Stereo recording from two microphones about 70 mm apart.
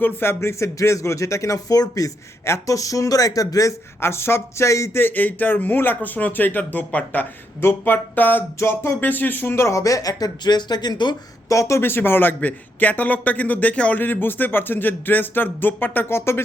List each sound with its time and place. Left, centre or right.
0.0 s speech: left
4.0 s speech: left
4.9 s a man's voice: left
7.6 s speech: left
7.9 s a man's voice: left
8.5 s speech: left
11.4 s speech: left
11.8 s a man's voice: left